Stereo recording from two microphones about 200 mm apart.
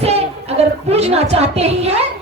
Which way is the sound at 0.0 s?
30° right (ahead or behind).